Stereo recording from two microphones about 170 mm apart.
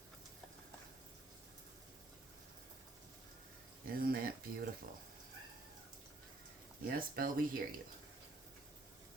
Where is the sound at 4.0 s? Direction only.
60° right (ahead or behind).